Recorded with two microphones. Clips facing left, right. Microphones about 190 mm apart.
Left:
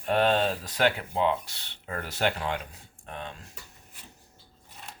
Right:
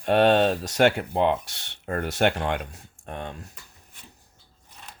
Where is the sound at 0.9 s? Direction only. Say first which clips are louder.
Right 4 dB; 60° right (ahead or behind).